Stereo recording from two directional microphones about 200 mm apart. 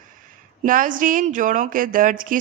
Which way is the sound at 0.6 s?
45° right (ahead or behind).